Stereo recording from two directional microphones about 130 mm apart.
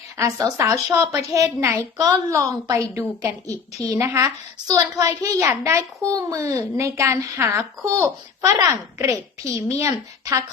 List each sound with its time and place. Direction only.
0.2 s a child's voice: 25° right (ahead or behind)